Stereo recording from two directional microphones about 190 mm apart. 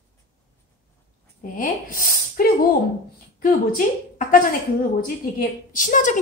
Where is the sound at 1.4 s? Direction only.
45° left (ahead or behind).